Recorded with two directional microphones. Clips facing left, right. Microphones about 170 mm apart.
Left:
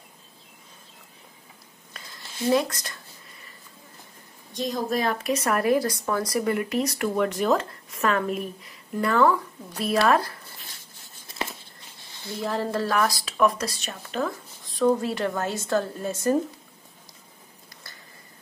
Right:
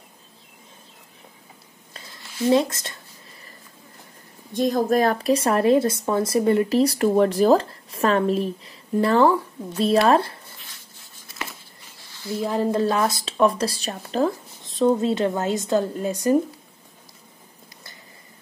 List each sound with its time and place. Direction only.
2.5 s a woman's voice: 25° right (ahead or behind)
4.6 s a woman's voice: 50° right (ahead or behind); by 10.4 s 30° right (ahead or behind)
12.4 s a woman's voice: 15° right (ahead or behind)